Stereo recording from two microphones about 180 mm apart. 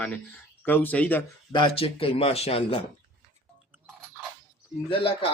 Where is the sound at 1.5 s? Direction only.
30° left (ahead or behind).